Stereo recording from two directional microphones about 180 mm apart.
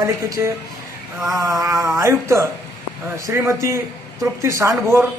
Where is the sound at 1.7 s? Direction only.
Centre (ahead or behind).